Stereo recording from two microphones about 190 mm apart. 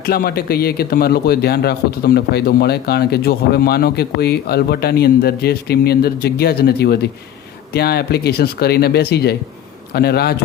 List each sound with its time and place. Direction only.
0.0 s speech: 55° left (ahead or behind)